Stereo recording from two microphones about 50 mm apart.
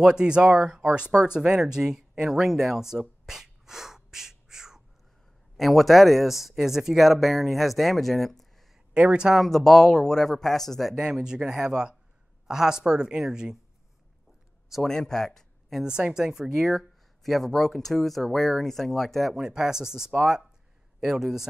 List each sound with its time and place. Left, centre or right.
0.0 s speech: centre
2.4 s a sound: centre
5.6 s speech: centre
8.9 s speech: right
9.3 s speech: centre
11.0 s speech: centre
14.8 s speech: centre
15.8 s speech: centre
16.5 s speech: centre
19.3 s speech: centre